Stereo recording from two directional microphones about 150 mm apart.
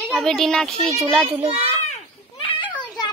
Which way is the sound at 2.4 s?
35° left (ahead or behind).